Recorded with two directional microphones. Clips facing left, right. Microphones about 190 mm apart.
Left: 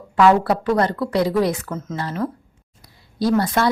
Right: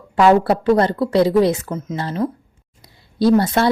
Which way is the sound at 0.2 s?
30° right (ahead or behind).